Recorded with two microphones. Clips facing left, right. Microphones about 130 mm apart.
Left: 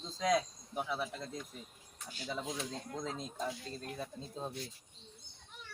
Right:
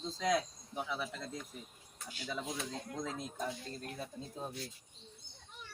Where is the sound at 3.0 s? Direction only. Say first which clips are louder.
Even; 20° left (ahead or behind).